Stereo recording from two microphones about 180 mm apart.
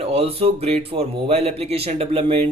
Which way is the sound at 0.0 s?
35° right (ahead or behind).